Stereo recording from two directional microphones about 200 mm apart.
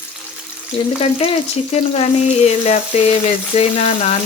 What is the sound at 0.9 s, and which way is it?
Speech, 30° left (ahead or behind).